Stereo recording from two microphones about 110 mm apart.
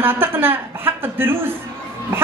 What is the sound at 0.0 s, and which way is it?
A woman's voice, 20° right (ahead or behind).